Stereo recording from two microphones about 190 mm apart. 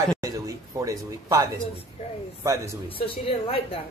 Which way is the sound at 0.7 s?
15° right (ahead or behind).